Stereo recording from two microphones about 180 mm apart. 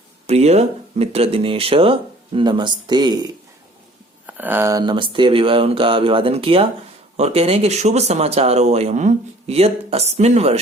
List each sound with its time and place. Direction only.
0.3 s speech: 35° right (ahead or behind)
4.3 s speech: 10° right (ahead or behind); by 10.6 s 35° right (ahead or behind)